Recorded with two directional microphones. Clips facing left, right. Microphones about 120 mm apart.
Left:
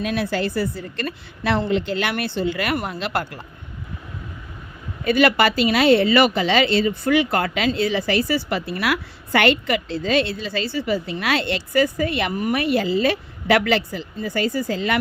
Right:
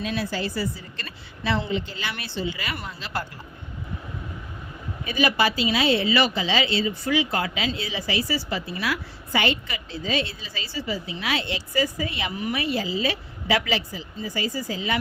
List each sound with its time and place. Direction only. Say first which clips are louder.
0.0 s a woman's voice: left 5 dB; 60° left (ahead or behind)
5.0 s a woman's voice: left 6 dB; 75° left (ahead or behind)